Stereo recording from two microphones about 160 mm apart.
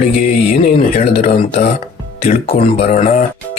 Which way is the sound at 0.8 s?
40° left (ahead or behind).